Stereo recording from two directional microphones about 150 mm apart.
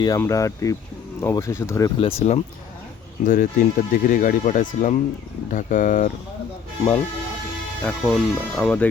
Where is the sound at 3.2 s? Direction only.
65° left (ahead or behind).